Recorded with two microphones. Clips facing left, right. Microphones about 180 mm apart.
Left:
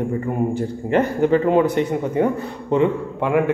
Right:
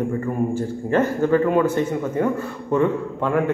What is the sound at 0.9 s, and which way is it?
A man's voice, 20° left (ahead or behind).